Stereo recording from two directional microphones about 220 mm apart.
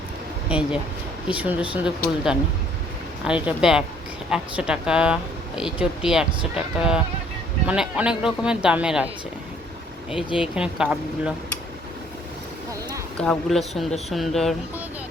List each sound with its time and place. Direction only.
0.4 s speech: 5° right (ahead or behind)
10.3 s speech: 5° right (ahead or behind)
13.2 s speech: centre (ahead or behind)